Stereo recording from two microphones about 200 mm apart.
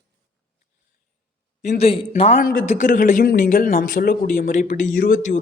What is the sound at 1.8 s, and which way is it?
Speech, 30° left (ahead or behind).